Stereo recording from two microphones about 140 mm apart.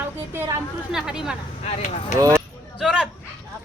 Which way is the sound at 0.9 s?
5° right (ahead or behind).